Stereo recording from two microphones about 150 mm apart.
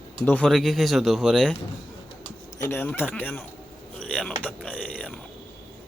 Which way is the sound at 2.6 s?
15° left (ahead or behind).